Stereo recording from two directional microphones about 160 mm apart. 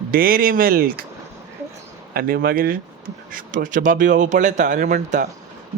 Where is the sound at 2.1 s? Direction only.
65° right (ahead or behind).